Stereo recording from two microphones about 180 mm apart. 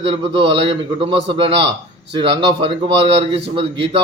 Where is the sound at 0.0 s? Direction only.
30° right (ahead or behind).